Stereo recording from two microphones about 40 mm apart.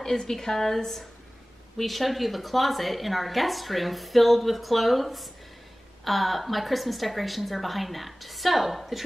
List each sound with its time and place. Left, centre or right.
0.0 s a woman's voice: centre